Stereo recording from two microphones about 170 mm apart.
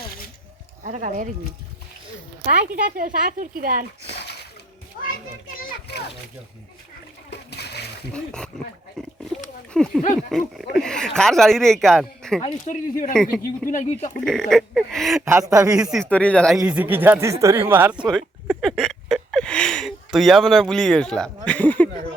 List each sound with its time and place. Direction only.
0.9 s speech: 50° right (ahead or behind)
2.5 s speech: 55° right (ahead or behind)
7.3 s splash: 75° left (ahead or behind)
8.1 s speech: 5° left (ahead or behind)
12.6 s speech: 50° left (ahead or behind)
14.3 s speech: 5° left (ahead or behind)
15.2 s speech: 15° right (ahead or behind)
15.8 s speech: 5° right (ahead or behind)
16.0 s speech: 10° left (ahead or behind)
16.6 s speech: 10° right (ahead or behind)
18.4 s speech: centre (ahead or behind)